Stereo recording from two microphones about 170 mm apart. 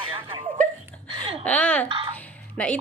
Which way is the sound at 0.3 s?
30° right (ahead or behind).